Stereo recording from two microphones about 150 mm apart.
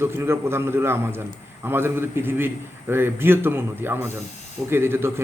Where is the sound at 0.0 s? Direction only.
15° right (ahead or behind).